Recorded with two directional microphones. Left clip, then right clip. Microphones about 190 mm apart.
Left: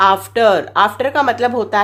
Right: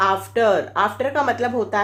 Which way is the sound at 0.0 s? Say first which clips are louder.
Left 6 dB; 40° left (ahead or behind).